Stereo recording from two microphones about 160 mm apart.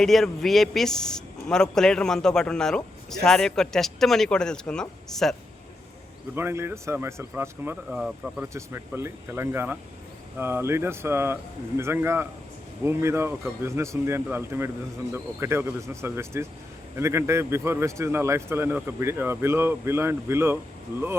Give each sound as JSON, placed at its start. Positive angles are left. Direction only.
{"t": 0.0, "sound": "a man's voice", "side_deg": 0}
{"t": 6.3, "sound": "a man's voice", "side_deg": -15}